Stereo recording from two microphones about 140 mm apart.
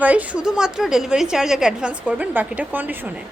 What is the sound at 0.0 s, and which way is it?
A woman's voice, 10° right (ahead or behind).